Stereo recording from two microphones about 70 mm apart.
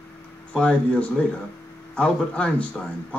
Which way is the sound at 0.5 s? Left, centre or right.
Centre.